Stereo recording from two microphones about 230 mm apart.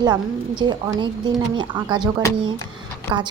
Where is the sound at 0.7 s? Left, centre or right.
Centre.